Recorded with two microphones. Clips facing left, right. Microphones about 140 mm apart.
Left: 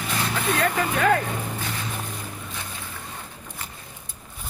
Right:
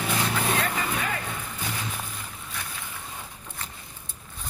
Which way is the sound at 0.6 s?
60° left (ahead or behind).